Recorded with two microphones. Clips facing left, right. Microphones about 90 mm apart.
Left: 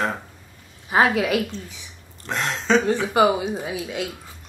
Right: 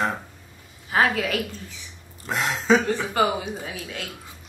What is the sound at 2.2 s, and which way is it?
Speech, 5° right (ahead or behind).